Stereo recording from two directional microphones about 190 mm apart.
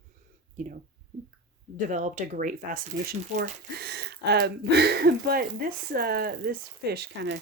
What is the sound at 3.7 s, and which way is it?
Speech, 60° right (ahead or behind).